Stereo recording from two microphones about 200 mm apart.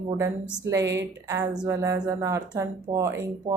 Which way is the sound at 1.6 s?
15° right (ahead or behind).